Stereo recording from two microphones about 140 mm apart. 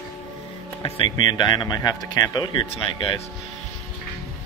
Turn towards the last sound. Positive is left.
turn(degrees=40)  # may be behind; listen again after turning